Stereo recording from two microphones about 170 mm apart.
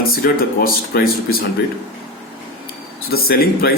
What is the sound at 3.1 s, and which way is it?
Speech, 60° left (ahead or behind).